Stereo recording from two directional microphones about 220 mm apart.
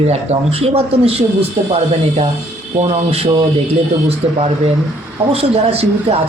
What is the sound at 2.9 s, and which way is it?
A man's voice, 30° right (ahead or behind).